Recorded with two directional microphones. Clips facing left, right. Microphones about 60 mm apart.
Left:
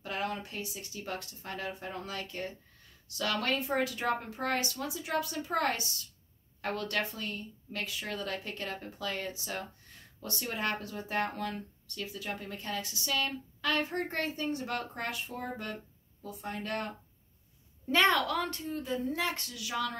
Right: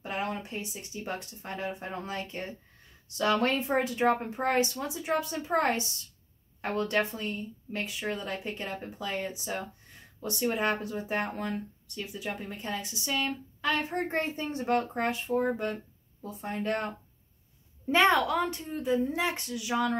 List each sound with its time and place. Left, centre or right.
0.0 s speech: right